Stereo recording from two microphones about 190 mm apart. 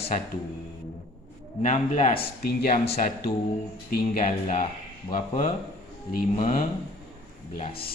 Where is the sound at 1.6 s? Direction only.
40° left (ahead or behind).